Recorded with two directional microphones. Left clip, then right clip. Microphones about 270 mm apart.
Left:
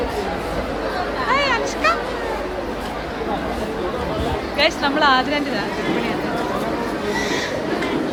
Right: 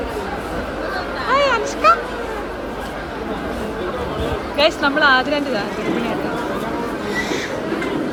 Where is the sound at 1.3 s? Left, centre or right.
Centre.